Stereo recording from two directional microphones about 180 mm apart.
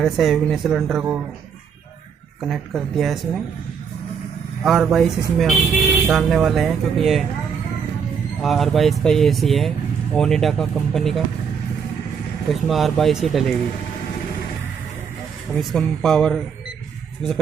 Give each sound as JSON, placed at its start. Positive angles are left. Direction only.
{"t": 0.0, "sound": "speech", "side_deg": 0}
{"t": 2.4, "sound": "speech", "side_deg": 0}
{"t": 4.6, "sound": "speech", "side_deg": 0}
{"t": 8.4, "sound": "speech", "side_deg": 0}
{"t": 12.5, "sound": "speech", "side_deg": 0}
{"t": 15.5, "sound": "speech", "side_deg": 0}